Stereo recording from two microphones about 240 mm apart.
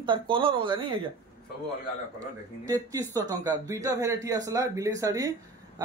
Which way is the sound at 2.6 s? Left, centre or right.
Centre.